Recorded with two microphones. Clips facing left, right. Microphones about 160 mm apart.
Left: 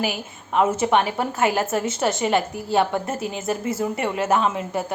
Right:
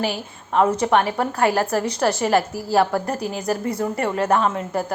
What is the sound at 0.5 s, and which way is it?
A woman's voice, 5° left (ahead or behind).